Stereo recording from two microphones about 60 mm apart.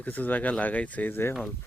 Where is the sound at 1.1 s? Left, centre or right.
Left.